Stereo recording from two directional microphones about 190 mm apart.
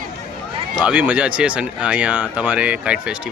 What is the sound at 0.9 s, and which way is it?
Speech, 10° right (ahead or behind).